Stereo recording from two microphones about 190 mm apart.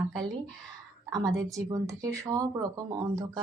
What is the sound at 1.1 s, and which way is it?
A woman's voice, 20° right (ahead or behind).